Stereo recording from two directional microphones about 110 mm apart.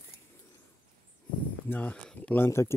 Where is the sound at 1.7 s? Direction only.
15° left (ahead or behind).